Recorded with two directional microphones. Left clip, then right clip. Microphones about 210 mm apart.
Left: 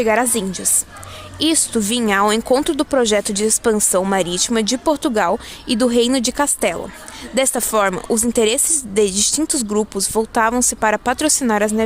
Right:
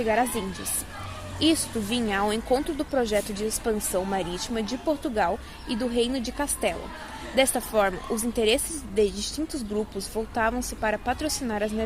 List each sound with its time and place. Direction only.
0.0 s a woman's voice: 50° left (ahead or behind)